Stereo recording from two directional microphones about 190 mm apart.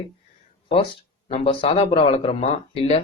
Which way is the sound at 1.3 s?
30° left (ahead or behind).